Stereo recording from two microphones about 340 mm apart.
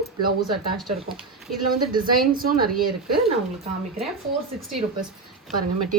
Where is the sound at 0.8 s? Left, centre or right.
Centre.